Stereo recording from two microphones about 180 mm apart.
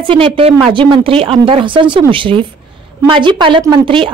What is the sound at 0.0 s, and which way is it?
Speech, 30° right (ahead or behind).